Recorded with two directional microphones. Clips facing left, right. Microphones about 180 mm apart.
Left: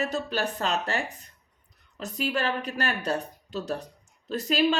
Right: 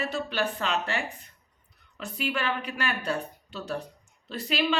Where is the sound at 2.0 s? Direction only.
40° left (ahead or behind).